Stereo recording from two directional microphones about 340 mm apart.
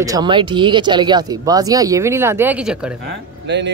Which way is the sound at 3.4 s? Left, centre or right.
Right.